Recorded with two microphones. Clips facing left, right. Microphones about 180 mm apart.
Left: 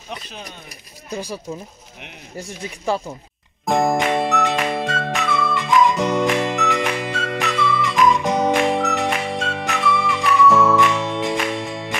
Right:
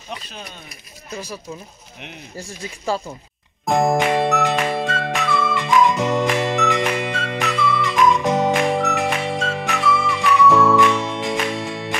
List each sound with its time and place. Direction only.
1.1 s speech: 35° left (ahead or behind)
3.6 s music: centre (ahead or behind)